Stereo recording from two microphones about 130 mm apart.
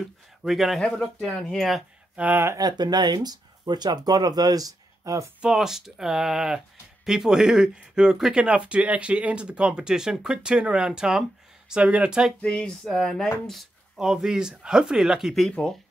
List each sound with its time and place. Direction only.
0.4 s speech: centre (ahead or behind)
2.1 s speech: 15° right (ahead or behind)
2.5 s speech: 30° right (ahead or behind)
5.4 s speech: 5° right (ahead or behind)
12.4 s speech: 10° left (ahead or behind)